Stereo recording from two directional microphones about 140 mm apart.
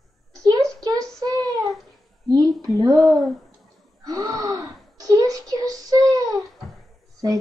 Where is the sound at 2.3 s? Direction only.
25° right (ahead or behind).